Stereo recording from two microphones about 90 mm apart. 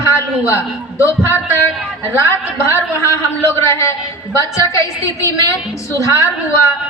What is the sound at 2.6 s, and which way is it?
A woman's voice, 30° left (ahead or behind).